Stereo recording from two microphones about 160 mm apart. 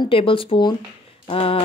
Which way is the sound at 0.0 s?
35° left (ahead or behind).